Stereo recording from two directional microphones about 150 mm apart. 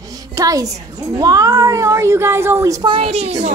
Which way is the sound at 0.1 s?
25° right (ahead or behind).